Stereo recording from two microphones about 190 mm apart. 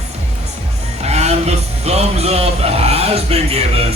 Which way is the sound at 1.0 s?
35° right (ahead or behind).